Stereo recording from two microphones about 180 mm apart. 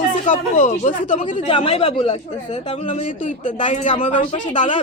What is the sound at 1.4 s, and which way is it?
Speech, 30° left (ahead or behind).